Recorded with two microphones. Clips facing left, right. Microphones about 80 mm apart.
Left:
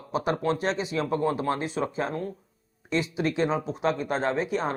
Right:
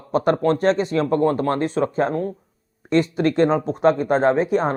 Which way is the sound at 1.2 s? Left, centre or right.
Right.